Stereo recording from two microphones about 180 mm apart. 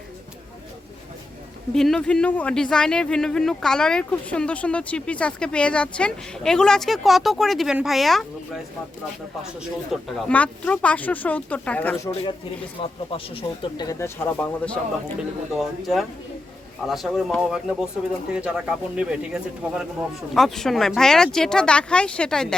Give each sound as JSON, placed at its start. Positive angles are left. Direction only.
{"t": 1.7, "sound": "speech", "side_deg": 0}
{"t": 9.9, "sound": "speech", "side_deg": 5}
{"t": 12.8, "sound": "speech", "side_deg": 30}